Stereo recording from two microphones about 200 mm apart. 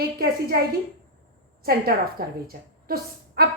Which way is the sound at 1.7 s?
50° right (ahead or behind).